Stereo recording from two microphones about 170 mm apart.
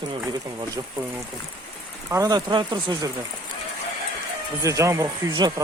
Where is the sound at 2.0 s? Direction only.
20° right (ahead or behind).